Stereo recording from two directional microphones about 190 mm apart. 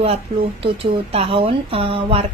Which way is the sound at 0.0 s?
30° right (ahead or behind).